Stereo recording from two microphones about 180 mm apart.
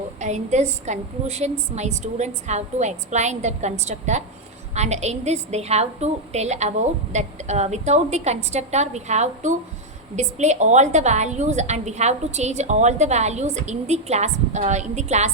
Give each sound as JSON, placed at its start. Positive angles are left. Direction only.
{"t": 0.2, "sound": "a woman's voice", "side_deg": -40}